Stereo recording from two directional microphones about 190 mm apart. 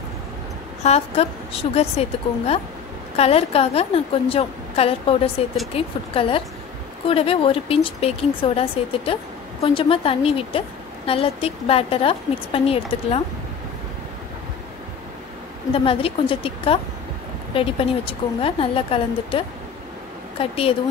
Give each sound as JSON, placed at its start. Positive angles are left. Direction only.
{"t": 0.8, "sound": "a woman's voice", "side_deg": 35}
{"t": 15.7, "sound": "a woman's voice", "side_deg": 30}